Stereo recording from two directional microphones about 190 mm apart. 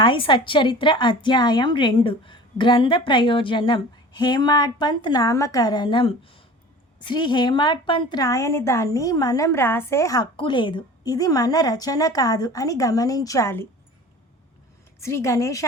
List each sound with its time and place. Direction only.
0.0 s a woman's voice: 25° left (ahead or behind)
15.0 s a woman's voice: 15° left (ahead or behind)